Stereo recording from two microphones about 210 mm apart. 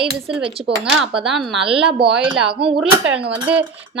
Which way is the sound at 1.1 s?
Centre (ahead or behind).